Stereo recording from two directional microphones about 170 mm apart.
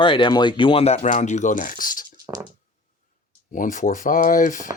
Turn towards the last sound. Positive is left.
turn(degrees=50)  # may be behind; listen again after turning